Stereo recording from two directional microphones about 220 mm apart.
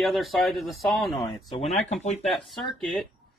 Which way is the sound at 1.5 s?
30° left (ahead or behind).